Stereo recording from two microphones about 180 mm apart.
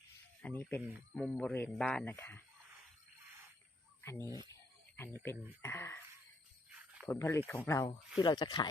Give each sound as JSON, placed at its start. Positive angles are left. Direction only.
{"t": 0.4, "sound": "speech", "side_deg": 10}
{"t": 0.8, "sound": "speech", "side_deg": -10}
{"t": 1.1, "sound": "speech", "side_deg": 0}
{"t": 4.0, "sound": "speech", "side_deg": 15}
{"t": 4.4, "sound": "a sound", "side_deg": 15}
{"t": 5.1, "sound": "speech", "side_deg": 15}
{"t": 6.7, "sound": "jingle bell", "side_deg": -5}
{"t": 7.1, "sound": "speech", "side_deg": 15}